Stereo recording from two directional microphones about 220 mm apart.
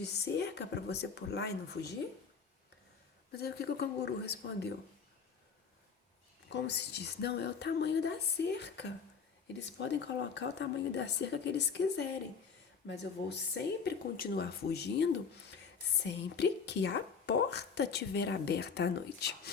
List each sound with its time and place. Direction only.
0.0 s a woman's voice: 50° left (ahead or behind)
3.3 s a woman's voice: 45° left (ahead or behind)
6.5 s a woman's voice: 50° left (ahead or behind)